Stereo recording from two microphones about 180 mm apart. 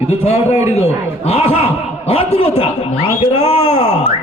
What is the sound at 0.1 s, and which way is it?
Speech, 35° left (ahead or behind).